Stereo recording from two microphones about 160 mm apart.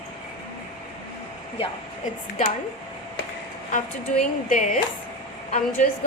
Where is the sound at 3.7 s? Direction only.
50° left (ahead or behind).